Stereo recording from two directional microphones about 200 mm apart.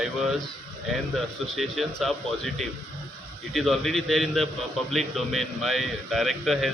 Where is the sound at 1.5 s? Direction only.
Centre (ahead or behind).